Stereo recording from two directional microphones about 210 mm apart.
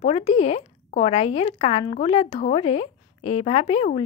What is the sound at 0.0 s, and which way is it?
Speech, 30° left (ahead or behind).